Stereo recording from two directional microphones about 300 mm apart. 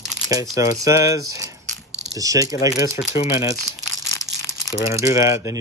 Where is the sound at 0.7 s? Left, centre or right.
Centre.